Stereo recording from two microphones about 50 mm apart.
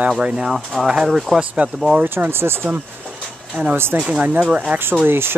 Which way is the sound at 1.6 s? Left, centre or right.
Right.